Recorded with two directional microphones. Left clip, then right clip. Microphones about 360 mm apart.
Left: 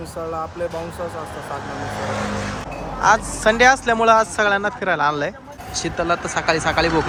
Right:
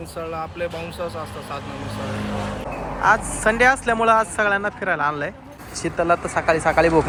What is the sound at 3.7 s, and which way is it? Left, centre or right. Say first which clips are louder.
Speech: left 2 dB; centre.